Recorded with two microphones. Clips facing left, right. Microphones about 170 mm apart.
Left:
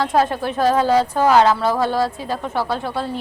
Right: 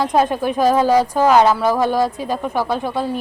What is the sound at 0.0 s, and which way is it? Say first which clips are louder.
A woman's voice: right 2 dB; 15° right (ahead or behind).